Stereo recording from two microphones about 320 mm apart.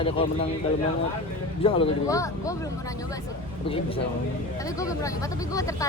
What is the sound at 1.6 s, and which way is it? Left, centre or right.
Speech, centre.